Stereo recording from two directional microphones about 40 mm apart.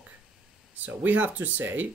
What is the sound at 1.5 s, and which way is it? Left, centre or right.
Speech, right.